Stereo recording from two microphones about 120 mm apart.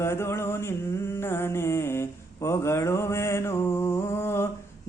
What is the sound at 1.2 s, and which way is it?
Mantra, 20° left (ahead or behind).